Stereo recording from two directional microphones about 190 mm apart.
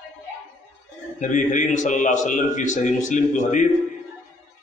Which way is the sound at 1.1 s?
40° left (ahead or behind).